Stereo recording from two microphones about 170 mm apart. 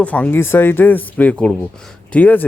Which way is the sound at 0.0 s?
10° left (ahead or behind).